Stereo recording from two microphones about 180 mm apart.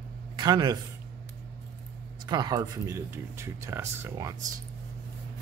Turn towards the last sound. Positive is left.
turn(degrees=-15)  # may be behind; listen again after turning